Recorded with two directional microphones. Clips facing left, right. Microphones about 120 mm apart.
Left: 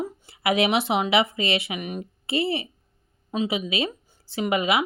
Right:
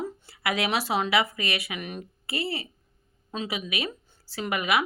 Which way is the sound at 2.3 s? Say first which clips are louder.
Left 7 dB; 25° left (ahead or behind).